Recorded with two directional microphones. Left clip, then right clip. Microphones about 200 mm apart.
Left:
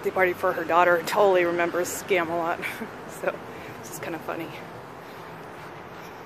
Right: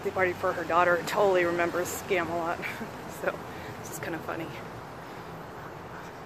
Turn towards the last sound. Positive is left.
turn(degrees=15)  # may be behind; listen again after turning